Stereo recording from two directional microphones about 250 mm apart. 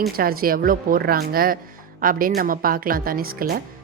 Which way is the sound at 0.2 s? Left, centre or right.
Right.